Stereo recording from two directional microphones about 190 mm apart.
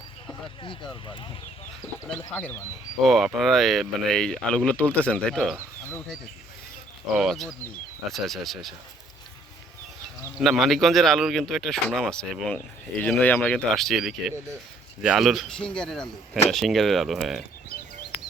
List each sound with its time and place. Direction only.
0.6 s speech: 25° left (ahead or behind)
1.8 s a man's voice: 5° left (ahead or behind)
7.2 s a man's voice: centre (ahead or behind)
10.3 s a man's voice: centre (ahead or behind)